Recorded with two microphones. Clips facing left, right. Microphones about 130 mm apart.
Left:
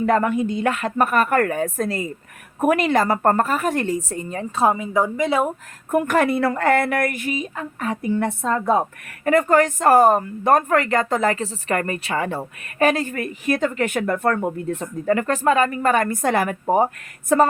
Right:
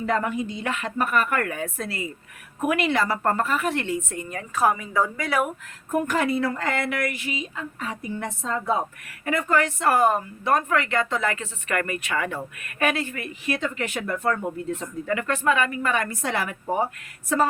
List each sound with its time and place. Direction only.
0.0 s a woman's voice: 55° left (ahead or behind); by 5.5 s 25° left (ahead or behind)
5.9 s a woman's voice: 60° left (ahead or behind)